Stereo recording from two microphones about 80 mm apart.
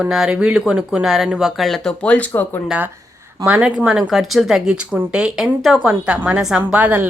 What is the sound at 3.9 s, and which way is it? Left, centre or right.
A woman's voice, centre.